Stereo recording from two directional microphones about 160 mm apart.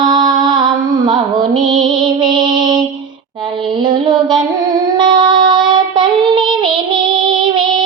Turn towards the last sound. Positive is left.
turn(degrees=-30)  # may be behind; listen again after turning